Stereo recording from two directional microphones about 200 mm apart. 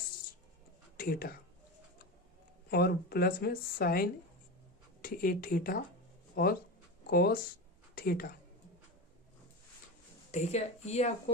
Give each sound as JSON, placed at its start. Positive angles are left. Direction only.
{"t": 0.9, "sound": "speech", "side_deg": 50}
{"t": 2.6, "sound": "a woman's voice", "side_deg": 50}
{"t": 10.3, "sound": "speech", "side_deg": 35}